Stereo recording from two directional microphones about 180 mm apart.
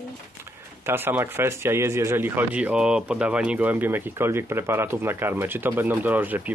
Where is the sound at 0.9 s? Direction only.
10° right (ahead or behind).